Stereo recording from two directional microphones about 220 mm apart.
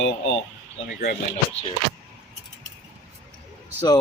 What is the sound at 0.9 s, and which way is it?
Speech, 40° left (ahead or behind).